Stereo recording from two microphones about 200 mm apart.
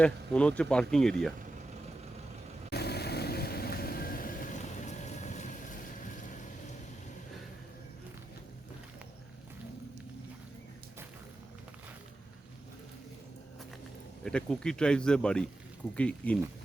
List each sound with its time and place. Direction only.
0.0 s speech: 5° left (ahead or behind)
2.6 s vehicle: 55° left (ahead or behind)
14.3 s speech: 5° left (ahead or behind)